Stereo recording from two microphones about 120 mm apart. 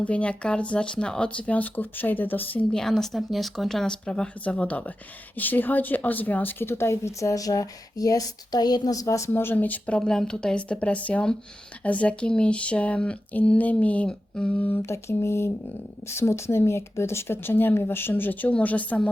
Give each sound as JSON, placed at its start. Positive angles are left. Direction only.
{"t": 0.0, "sound": "a woman's voice", "side_deg": 10}